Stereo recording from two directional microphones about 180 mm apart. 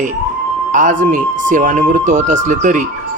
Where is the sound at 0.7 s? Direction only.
45° right (ahead or behind).